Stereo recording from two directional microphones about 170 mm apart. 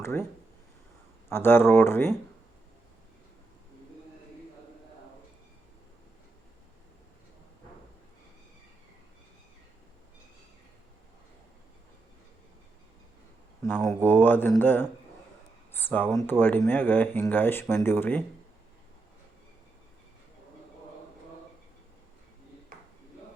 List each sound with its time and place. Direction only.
0.0 s speech: 15° left (ahead or behind)
1.3 s speech: 15° left (ahead or behind)
13.8 s speech: 10° left (ahead or behind)